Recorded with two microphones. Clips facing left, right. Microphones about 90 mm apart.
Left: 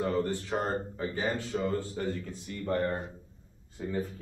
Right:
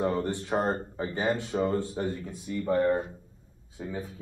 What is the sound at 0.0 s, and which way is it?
Speech, 20° right (ahead or behind).